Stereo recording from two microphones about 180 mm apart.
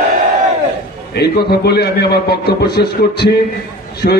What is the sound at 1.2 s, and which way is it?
A man's voice, 65° left (ahead or behind).